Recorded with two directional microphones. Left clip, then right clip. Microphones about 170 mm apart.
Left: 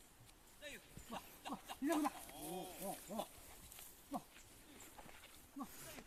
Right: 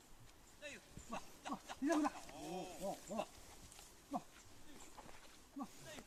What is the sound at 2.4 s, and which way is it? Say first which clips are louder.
Wild animals: right 1 dB; 10° left (ahead or behind).